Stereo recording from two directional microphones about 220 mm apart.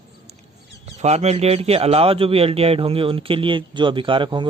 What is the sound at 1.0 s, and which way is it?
A man's voice, 30° right (ahead or behind).